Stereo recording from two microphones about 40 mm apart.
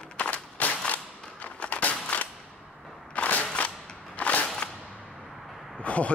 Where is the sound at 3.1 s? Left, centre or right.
Left.